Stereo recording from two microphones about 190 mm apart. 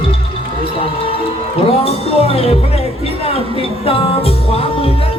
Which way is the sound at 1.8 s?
30° left (ahead or behind).